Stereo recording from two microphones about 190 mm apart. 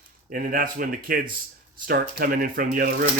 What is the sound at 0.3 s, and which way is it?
Speech, 45° right (ahead or behind).